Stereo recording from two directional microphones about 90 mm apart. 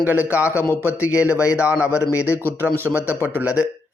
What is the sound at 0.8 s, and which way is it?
Speech, 15° right (ahead or behind).